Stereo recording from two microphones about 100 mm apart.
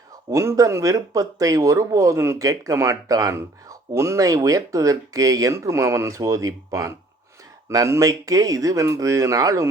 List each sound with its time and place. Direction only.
0.3 s speech: 30° right (ahead or behind)